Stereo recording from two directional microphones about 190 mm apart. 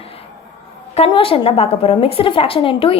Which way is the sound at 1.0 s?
30° left (ahead or behind).